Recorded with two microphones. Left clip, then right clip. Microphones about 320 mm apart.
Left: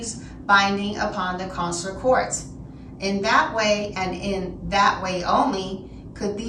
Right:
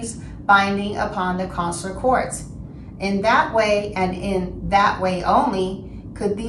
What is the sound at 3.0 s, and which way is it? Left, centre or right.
A woman's voice, centre.